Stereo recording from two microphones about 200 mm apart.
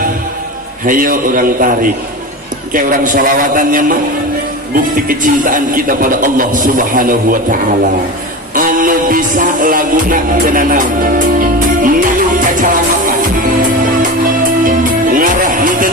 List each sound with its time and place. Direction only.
0.9 s a man's voice: 45° right (ahead or behind)
8.5 s music: 45° right (ahead or behind)
14.6 s music: 45° right (ahead or behind)